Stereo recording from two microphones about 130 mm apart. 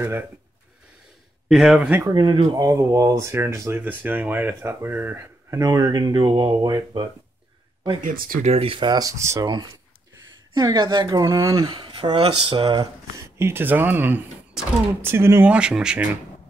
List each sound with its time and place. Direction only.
1.5 s speech: 5° right (ahead or behind)
2.0 s speech: 35° right (ahead or behind)
8.0 s speech: 90° right
8.5 s speech: 45° right (ahead or behind); by 11.6 s 25° right (ahead or behind)
11.6 s speech: 40° right (ahead or behind)
13.4 s speech: 15° right (ahead or behind)
14.6 s speech: 5° right (ahead or behind)
15.0 s speech: 20° right (ahead or behind)
15.5 s speech: 5° right (ahead or behind)